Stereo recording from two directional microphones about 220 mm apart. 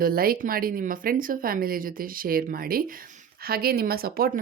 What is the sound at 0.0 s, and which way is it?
Speech, 40° right (ahead or behind).